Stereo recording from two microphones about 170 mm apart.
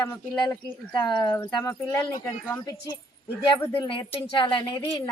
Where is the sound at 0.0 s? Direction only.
25° left (ahead or behind).